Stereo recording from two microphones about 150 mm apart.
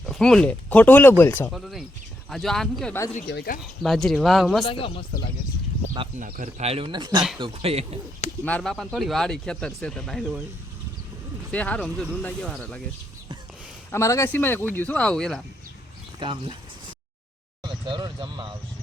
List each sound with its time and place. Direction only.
0.0 s speech: centre (ahead or behind)
1.5 s speech: centre (ahead or behind)
3.2 s speech: 90° left
3.8 s speech: centre (ahead or behind)
4.6 s speech: 35° left (ahead or behind)
6.1 s speech: 70° right (ahead or behind)
6.6 s speech: 40° right (ahead or behind)
8.4 s speech: 10° left (ahead or behind)
11.5 s speech: 10° left (ahead or behind)
13.9 s speech: 20° left (ahead or behind)
16.2 s speech: 30° right (ahead or behind)
17.6 s speech: 30° right (ahead or behind)